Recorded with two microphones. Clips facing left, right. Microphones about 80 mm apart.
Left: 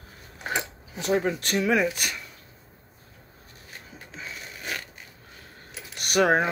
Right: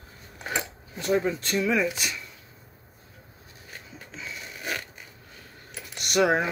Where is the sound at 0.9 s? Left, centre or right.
Left.